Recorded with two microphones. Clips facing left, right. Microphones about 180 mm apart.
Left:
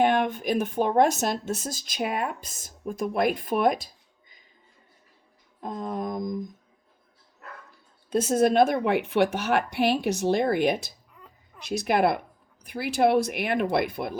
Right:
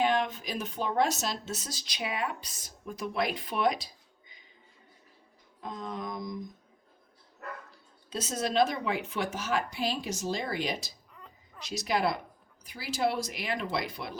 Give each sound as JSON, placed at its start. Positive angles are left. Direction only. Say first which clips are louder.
{"t": 0.0, "sound": "speech", "louder": "left 5 dB", "side_deg": 55}
{"t": 5.5, "sound": "speech", "louder": "left 6 dB", "side_deg": 50}
{"t": 8.1, "sound": "speech", "louder": "left 9 dB", "side_deg": 55}